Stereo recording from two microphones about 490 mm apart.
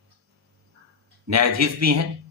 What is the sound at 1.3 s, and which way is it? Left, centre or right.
Speech, right.